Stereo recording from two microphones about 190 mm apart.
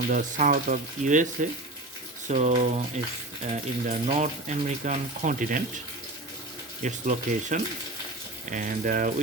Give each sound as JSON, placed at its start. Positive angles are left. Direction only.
{"t": 0.1, "sound": "speech", "side_deg": -45}
{"t": 6.8, "sound": "speech", "side_deg": -40}